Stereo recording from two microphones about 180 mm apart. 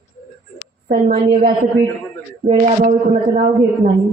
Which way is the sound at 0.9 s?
55° right (ahead or behind).